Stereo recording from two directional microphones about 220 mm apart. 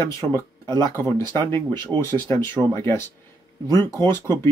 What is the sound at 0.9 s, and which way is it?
Speech, 10° left (ahead or behind).